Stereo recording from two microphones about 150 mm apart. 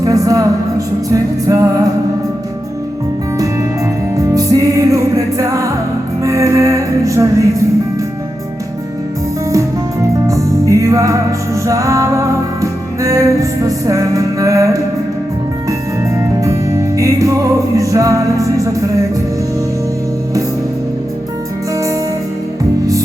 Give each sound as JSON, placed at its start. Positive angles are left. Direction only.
{"t": 0.0, "sound": "a woman's voice", "side_deg": -25}
{"t": 1.1, "sound": "music", "side_deg": -20}
{"t": 4.4, "sound": "music", "side_deg": -25}
{"t": 10.2, "sound": "music", "side_deg": -20}
{"t": 16.4, "sound": "music", "side_deg": -20}